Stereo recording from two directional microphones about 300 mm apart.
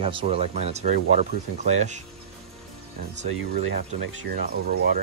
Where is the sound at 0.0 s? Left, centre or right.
Centre.